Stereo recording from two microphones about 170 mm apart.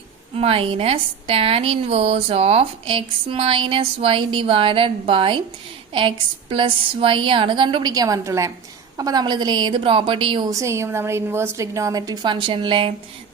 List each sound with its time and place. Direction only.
0.3 s a woman's voice: 35° right (ahead or behind)